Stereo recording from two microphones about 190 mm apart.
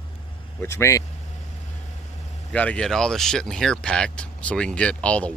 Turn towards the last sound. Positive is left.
turn(degrees=5)  # may be behind; listen again after turning